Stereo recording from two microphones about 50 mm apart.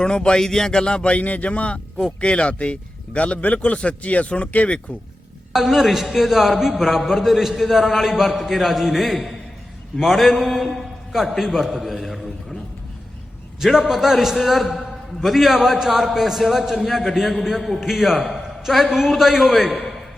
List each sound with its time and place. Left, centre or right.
0.0 s a man's voice: centre
5.5 s a man's voice: centre
11.7 s a sound: centre
13.6 s a man's voice: centre